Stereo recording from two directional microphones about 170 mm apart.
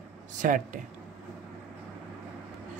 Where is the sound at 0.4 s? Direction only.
55° right (ahead or behind).